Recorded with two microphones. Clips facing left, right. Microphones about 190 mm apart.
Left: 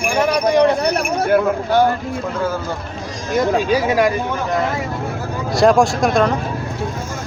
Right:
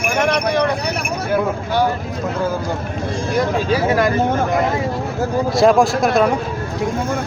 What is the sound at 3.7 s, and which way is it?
Speech, 15° left (ahead or behind).